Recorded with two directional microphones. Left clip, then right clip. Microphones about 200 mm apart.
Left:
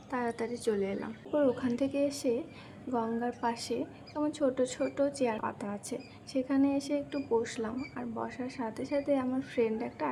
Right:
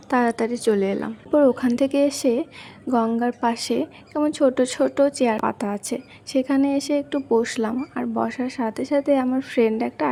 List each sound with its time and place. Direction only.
0.1 s a woman's voice: 45° right (ahead or behind)